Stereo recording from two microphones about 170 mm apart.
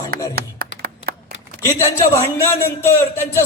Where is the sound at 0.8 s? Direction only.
65° right (ahead or behind).